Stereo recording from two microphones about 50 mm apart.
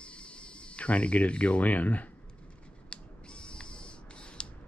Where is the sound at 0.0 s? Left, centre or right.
Left.